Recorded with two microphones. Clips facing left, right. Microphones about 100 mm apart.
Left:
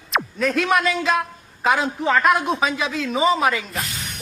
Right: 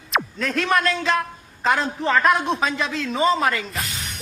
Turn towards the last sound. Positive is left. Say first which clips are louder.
# left 1 dB
turn(degrees=0)  # may be behind; listen again after turning